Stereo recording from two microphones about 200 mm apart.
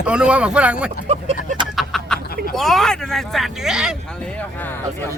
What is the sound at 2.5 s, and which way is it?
Speech, centre (ahead or behind).